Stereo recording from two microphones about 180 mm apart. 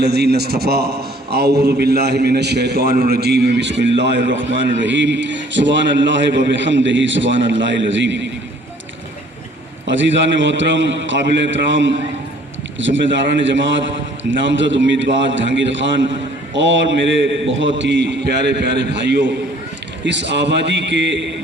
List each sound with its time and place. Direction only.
0.0 s a man's voice: 65° right (ahead or behind); by 8.3 s 85° right
9.8 s a man's voice: 90° right
17.7 s a man's voice: 75° right (ahead or behind)